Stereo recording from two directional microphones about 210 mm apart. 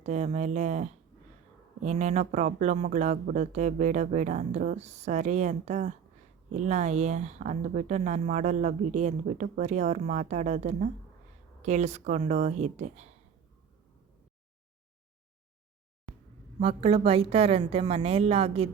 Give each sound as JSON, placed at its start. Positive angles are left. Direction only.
{"t": 0.0, "sound": "a woman's voice", "side_deg": -35}
{"t": 16.6, "sound": "a woman's voice", "side_deg": -25}